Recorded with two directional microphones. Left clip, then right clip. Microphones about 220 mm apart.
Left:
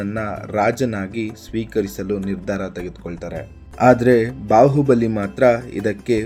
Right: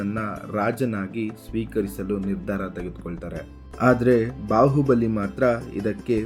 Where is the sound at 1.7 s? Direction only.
15° left (ahead or behind).